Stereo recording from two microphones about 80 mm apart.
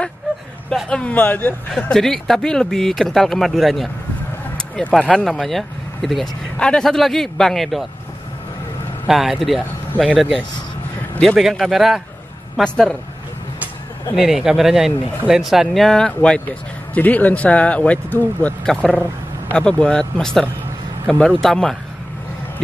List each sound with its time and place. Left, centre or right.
0.8 s speech: centre
1.7 s speech: centre
9.0 s speech: centre
12.6 s speech: centre
14.1 s speech: centre
16.2 s speech: centre
18.7 s speech: centre